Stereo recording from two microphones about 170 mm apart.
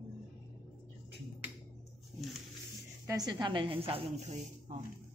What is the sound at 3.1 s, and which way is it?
A woman's voice, 25° right (ahead or behind).